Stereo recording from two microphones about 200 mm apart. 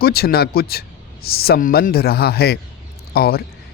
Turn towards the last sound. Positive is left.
turn(degrees=50)  # may be behind; listen again after turning